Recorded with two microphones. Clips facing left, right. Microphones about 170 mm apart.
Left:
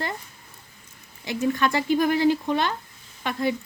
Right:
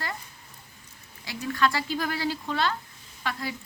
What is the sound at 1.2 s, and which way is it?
A woman's voice, 20° left (ahead or behind).